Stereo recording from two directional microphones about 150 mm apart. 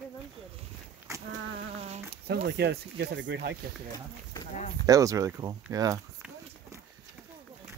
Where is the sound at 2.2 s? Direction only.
90° right.